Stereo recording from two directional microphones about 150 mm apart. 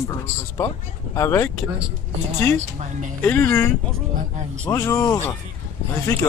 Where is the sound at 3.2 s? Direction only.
15° left (ahead or behind).